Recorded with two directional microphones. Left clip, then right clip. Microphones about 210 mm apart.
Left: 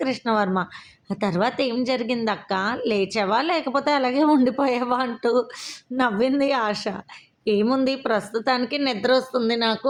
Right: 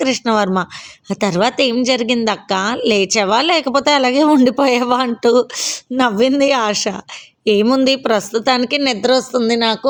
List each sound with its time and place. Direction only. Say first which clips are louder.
0.0 s a woman's voice: right 7 dB; 40° right (ahead or behind)